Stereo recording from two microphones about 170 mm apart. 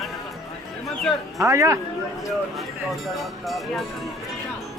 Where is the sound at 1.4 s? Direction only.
20° right (ahead or behind).